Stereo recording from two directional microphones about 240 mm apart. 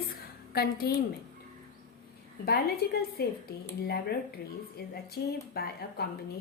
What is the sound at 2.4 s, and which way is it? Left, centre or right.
Speech, left.